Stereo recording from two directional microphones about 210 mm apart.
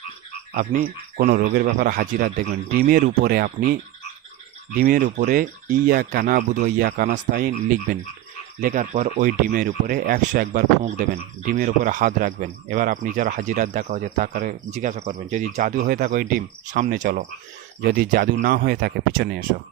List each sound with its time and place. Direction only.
0.5 s speech: 40° right (ahead or behind)
4.8 s speech: 45° right (ahead or behind)